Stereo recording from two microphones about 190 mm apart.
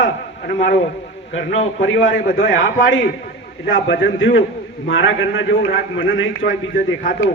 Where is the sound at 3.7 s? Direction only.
70° left (ahead or behind).